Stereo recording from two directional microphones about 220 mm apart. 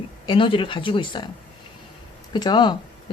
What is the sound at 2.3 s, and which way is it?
Speech, 20° left (ahead or behind).